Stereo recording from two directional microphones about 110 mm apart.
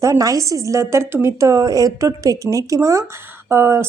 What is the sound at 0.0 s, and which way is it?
A woman's voice, 30° right (ahead or behind).